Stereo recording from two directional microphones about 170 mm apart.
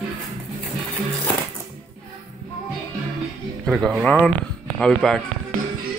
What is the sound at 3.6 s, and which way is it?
Speech, centre (ahead or behind).